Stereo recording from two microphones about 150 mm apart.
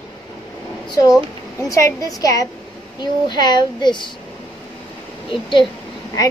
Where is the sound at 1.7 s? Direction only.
20° left (ahead or behind).